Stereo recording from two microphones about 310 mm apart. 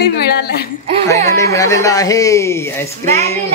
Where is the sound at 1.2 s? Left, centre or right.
Centre.